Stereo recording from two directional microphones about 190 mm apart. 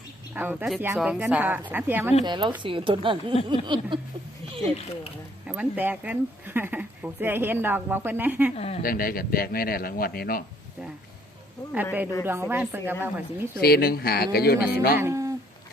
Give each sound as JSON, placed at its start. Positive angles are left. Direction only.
{"t": 0.3, "sound": "speech", "side_deg": -5}
{"t": 2.2, "sound": "speech", "side_deg": -25}
{"t": 5.5, "sound": "speech", "side_deg": -10}
{"t": 8.5, "sound": "speech", "side_deg": 35}
{"t": 8.8, "sound": "a man's voice", "side_deg": 50}
{"t": 12.2, "sound": "speech", "side_deg": -10}
{"t": 13.6, "sound": "speech", "side_deg": 55}
{"t": 14.9, "sound": "speech", "side_deg": -15}